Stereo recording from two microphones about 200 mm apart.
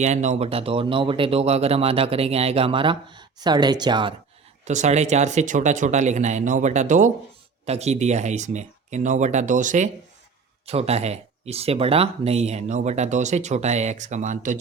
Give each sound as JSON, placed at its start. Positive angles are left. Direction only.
{"t": 0.0, "sound": "speech", "side_deg": -35}
{"t": 4.6, "sound": "speech", "side_deg": -35}